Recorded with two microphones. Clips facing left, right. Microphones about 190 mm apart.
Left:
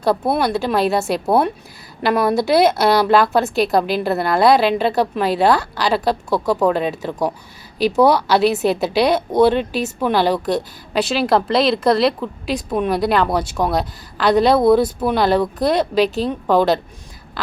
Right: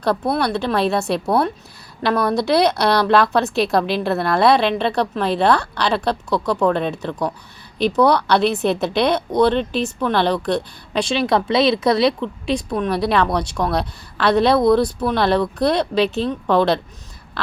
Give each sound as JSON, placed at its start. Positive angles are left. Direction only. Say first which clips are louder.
{"t": 0.3, "sound": "a woman's voice", "louder": "left 1 dB", "side_deg": 5}
{"t": 14.8, "sound": "speech", "louder": "left 2 dB", "side_deg": 25}
{"t": 15.1, "sound": "a woman's voice", "louder": "left 2 dB", "side_deg": 0}
{"t": 16.0, "sound": "a woman's voice", "louder": "left 1 dB", "side_deg": 40}
{"t": 16.5, "sound": "a woman's voice", "louder": "left 1 dB", "side_deg": 5}
{"t": 17.4, "sound": "a sound", "louder": "even", "side_deg": 0}